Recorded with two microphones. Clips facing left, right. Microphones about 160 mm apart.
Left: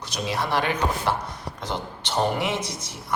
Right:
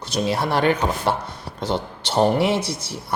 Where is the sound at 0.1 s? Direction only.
55° right (ahead or behind).